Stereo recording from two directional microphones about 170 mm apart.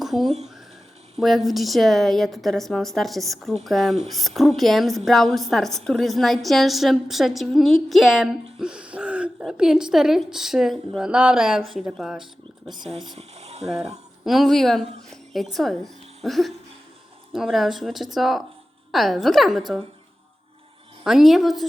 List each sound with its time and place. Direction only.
0.0 s a woman's voice: centre (ahead or behind)
13.1 s boiling: 40° right (ahead or behind)
14.3 s a woman's voice: centre (ahead or behind)
21.0 s a woman's voice: centre (ahead or behind)